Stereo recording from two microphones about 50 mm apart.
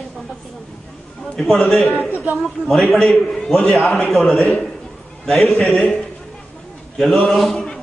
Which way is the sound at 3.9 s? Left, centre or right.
Centre.